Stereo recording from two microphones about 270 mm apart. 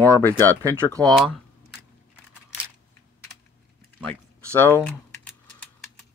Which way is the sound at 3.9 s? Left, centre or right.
Centre.